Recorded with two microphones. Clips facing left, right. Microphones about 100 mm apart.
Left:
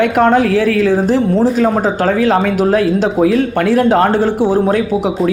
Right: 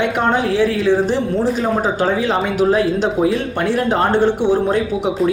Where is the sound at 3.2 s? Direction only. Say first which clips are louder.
Left 5 dB; 70° left (ahead or behind).